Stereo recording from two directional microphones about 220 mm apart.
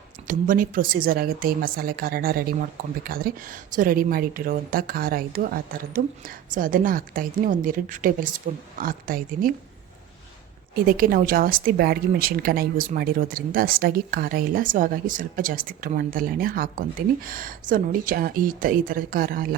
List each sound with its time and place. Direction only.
0.3 s a woman's voice: 40° right (ahead or behind)
10.8 s a woman's voice: 40° right (ahead or behind)